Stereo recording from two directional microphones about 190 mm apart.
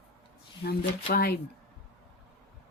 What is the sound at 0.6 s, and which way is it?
Speech, 55° left (ahead or behind).